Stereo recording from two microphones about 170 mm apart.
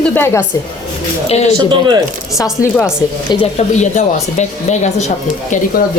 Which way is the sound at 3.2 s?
40° left (ahead or behind).